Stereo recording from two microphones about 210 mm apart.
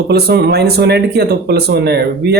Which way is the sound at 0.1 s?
50° right (ahead or behind).